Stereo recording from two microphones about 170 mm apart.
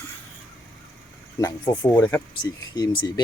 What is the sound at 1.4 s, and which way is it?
Speech, 20° left (ahead or behind).